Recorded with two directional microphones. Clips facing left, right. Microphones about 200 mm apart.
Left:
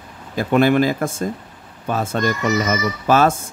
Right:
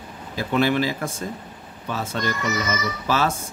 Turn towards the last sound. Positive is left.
turn(degrees=50)  # may be behind; listen again after turning